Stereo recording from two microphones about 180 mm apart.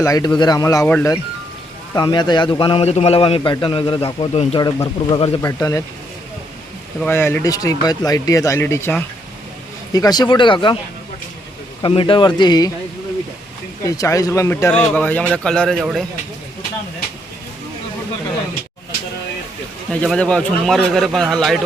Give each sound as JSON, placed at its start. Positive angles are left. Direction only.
{"t": 0.0, "sound": "a man's voice", "side_deg": 20}
{"t": 0.9, "sound": "speech", "side_deg": 10}
{"t": 1.9, "sound": "a man's voice", "side_deg": 25}
{"t": 5.4, "sound": "speech", "side_deg": 20}
{"t": 7.0, "sound": "a man's voice", "side_deg": 10}
{"t": 11.8, "sound": "a man's voice", "side_deg": 30}
{"t": 13.8, "sound": "speech", "side_deg": 20}
{"t": 19.9, "sound": "speech", "side_deg": 5}